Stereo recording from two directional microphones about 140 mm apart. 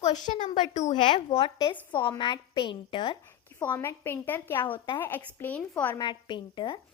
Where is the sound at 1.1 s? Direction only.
40° left (ahead or behind).